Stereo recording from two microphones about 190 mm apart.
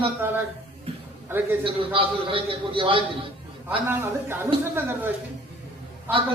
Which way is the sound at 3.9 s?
10° right (ahead or behind).